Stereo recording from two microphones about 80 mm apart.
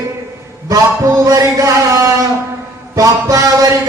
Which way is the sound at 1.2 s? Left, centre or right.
Right.